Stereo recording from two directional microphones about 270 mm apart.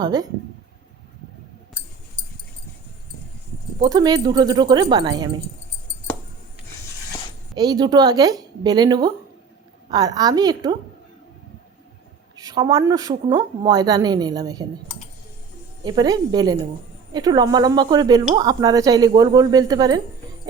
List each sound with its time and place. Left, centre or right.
0.0 s speech: centre
3.8 s speech: centre
7.5 s speech: centre
12.4 s speech: centre
15.8 s speech: centre